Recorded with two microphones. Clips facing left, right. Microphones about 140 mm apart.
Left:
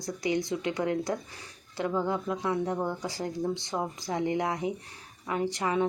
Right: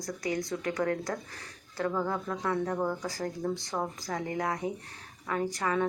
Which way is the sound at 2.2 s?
15° left (ahead or behind).